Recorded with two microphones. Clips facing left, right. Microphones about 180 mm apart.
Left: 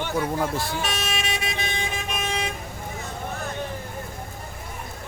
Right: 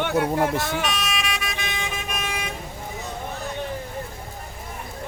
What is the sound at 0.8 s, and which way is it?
Vehicle, 30° left (ahead or behind).